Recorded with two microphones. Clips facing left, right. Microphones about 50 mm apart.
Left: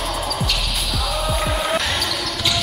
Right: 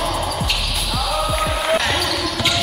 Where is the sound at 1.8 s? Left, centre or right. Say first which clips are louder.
Right 3 dB; centre.